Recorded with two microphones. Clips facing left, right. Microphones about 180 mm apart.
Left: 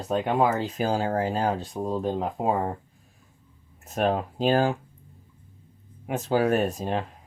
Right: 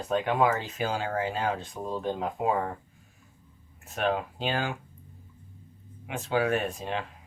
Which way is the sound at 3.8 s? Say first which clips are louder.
Left 3 dB; 40° left (ahead or behind).